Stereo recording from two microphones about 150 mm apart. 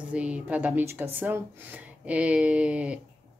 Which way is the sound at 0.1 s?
10° right (ahead or behind).